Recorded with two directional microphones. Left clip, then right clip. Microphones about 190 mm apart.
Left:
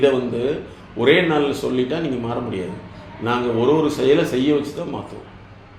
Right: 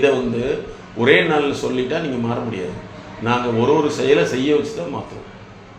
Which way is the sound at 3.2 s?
30° left (ahead or behind).